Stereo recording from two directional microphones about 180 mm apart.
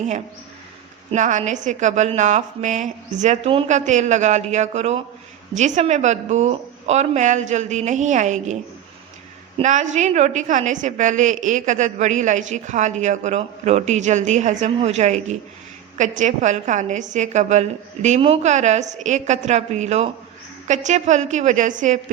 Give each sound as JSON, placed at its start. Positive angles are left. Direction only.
{"t": 1.1, "sound": "a woman's voice", "side_deg": -40}
{"t": 9.6, "sound": "a woman's voice", "side_deg": -45}